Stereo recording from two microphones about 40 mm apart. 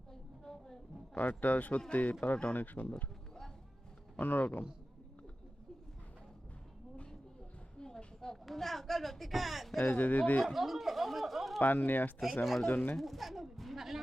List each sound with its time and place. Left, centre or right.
0.1 s a sound: centre
1.1 s speech: left
4.2 s speech: left
7.8 s a sound: centre
8.4 s speech: centre
9.8 s speech: left
10.4 s speech: centre
11.6 s speech: left
13.0 s speech: centre